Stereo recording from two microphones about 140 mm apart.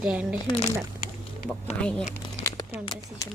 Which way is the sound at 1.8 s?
5° left (ahead or behind).